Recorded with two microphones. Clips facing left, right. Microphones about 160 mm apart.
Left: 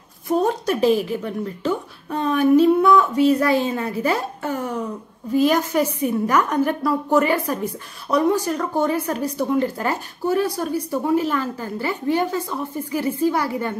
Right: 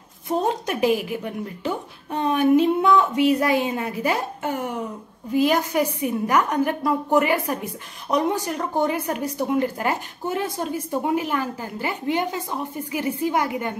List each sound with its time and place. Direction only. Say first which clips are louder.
0.3 s a woman's voice: left 3 dB; 20° right (ahead or behind)